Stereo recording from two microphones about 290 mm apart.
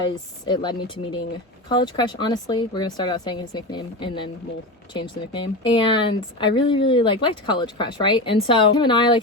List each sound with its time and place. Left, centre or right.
0.4 s speech: centre